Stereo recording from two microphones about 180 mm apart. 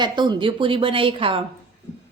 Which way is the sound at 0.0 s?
25° right (ahead or behind).